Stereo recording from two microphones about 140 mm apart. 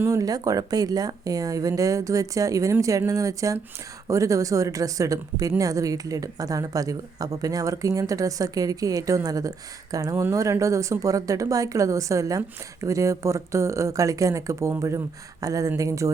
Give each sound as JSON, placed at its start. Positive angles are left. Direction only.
{"t": 0.0, "sound": "speech", "side_deg": -25}